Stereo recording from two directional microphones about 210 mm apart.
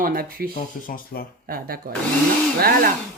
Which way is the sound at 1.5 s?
45° right (ahead or behind).